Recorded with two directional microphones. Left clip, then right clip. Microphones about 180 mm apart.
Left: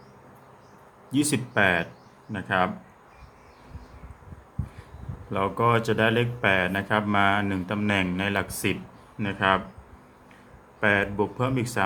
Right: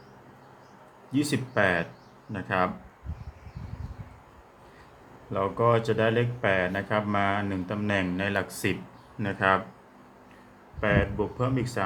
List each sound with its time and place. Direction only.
1.1 s speech: 20° left (ahead or behind)
5.3 s speech: 20° left (ahead or behind)
10.8 s speech: 25° left (ahead or behind)